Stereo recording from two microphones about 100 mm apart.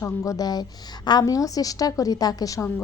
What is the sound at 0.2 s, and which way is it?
A woman's voice, 35° left (ahead or behind).